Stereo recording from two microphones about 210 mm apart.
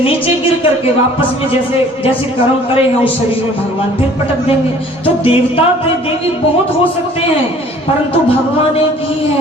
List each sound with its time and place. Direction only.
5.2 s music: 25° left (ahead or behind)